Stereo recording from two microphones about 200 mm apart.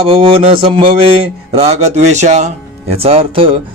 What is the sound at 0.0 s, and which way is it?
A man's voice, 30° right (ahead or behind).